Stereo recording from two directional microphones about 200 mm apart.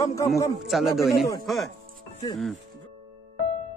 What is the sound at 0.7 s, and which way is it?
Speech, centre (ahead or behind).